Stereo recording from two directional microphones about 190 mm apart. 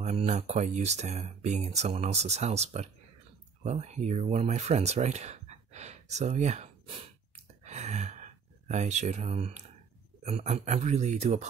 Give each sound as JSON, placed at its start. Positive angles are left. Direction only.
{"t": 0.0, "sound": "speech", "side_deg": -35}
{"t": 7.6, "sound": "a sound", "side_deg": -35}
{"t": 10.2, "sound": "speech", "side_deg": -35}